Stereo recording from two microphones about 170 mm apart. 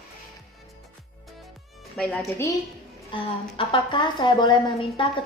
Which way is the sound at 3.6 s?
30° left (ahead or behind).